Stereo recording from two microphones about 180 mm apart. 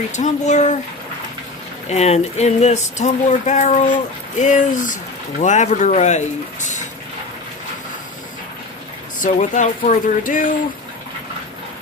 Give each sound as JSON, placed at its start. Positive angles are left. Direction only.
{"t": 0.1, "sound": "speech", "side_deg": 40}
{"t": 1.9, "sound": "speech", "side_deg": 35}
{"t": 9.2, "sound": "speech", "side_deg": 45}